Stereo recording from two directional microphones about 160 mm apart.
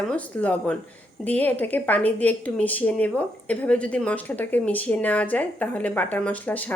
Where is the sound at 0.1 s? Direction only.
10° left (ahead or behind).